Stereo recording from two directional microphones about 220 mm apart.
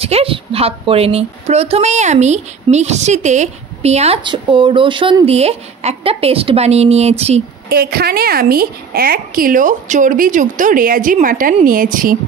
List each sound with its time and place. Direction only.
0.0 s a woman's voice: 25° right (ahead or behind)
7.7 s a woman's voice: 45° right (ahead or behind)